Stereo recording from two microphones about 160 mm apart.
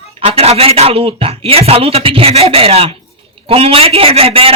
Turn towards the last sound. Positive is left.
turn(degrees=-35)  # may be behind; listen again after turning